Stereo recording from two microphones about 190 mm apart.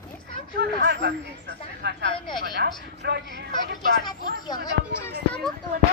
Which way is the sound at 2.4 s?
60° right (ahead or behind).